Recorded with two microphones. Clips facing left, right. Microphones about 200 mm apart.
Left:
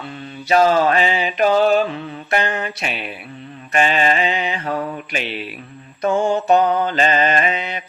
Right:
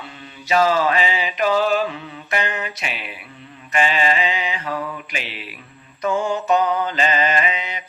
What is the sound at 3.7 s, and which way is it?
Mantra, 50° left (ahead or behind).